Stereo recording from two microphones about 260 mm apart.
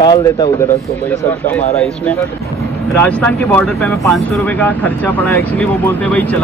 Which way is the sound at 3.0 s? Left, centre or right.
Centre.